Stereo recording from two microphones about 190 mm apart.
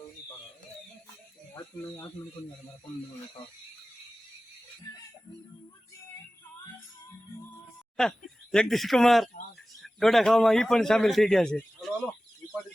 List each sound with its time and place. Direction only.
1.5 s speech: 20° left (ahead or behind)
8.0 s a man's voice: centre (ahead or behind)